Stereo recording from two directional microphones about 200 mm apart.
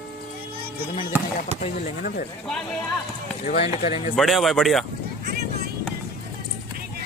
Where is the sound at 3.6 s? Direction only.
35° left (ahead or behind).